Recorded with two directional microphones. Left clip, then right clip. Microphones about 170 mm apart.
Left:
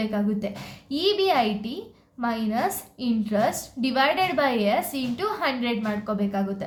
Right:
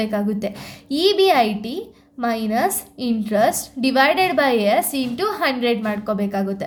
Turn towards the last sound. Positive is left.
turn(degrees=-35)  # may be behind; listen again after turning